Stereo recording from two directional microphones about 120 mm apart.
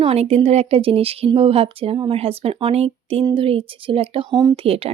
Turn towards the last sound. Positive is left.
turn(degrees=-55)  # may be behind; listen again after turning